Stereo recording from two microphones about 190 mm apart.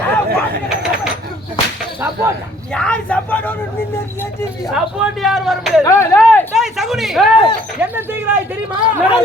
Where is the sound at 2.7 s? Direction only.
5° left (ahead or behind).